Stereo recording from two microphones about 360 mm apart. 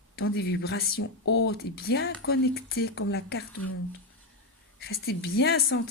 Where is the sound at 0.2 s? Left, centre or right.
Left.